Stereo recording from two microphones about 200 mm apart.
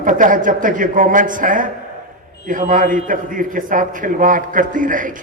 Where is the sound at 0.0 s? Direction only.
40° right (ahead or behind).